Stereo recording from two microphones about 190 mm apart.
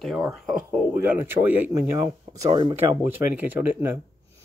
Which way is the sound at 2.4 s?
25° right (ahead or behind).